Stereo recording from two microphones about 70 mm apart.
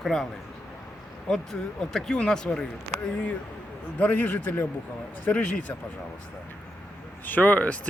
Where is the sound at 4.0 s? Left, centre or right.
Left.